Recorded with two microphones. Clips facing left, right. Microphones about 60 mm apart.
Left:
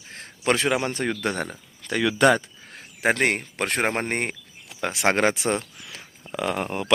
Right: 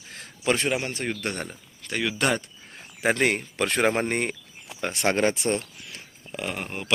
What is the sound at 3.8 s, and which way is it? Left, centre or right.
Speech, left.